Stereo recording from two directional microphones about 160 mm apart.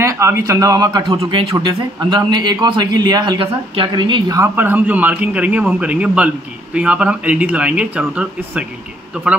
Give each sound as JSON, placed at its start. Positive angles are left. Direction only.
{"t": 0.0, "sound": "speech", "side_deg": -20}